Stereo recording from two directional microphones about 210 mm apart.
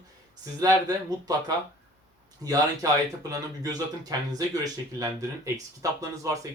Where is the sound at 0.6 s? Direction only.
15° right (ahead or behind).